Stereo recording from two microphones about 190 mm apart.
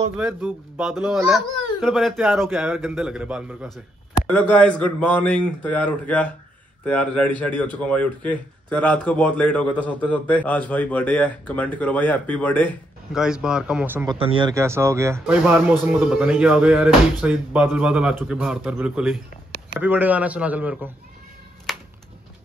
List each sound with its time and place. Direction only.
0.2 s a man's voice: 5° right (ahead or behind)
13.1 s speech: 5° right (ahead or behind)
14.0 s speech: 30° right (ahead or behind)
14.5 s speech: 15° right (ahead or behind)
21.7 s a sound: centre (ahead or behind)